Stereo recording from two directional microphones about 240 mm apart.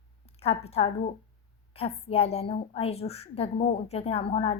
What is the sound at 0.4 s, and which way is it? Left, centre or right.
A woman's voice, left.